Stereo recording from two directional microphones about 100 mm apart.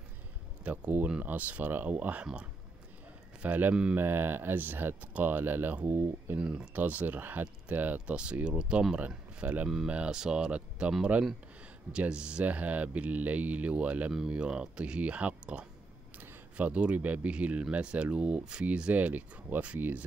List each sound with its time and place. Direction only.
0.7 s speech: 15° right (ahead or behind)
3.4 s speech: 15° right (ahead or behind)
6.4 s speech: 10° right (ahead or behind)